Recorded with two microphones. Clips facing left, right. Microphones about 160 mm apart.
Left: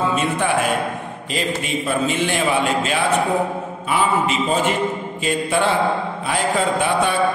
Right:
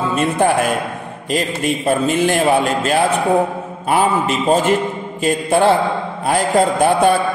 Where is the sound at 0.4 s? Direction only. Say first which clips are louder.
Right 6 dB; 40° right (ahead or behind).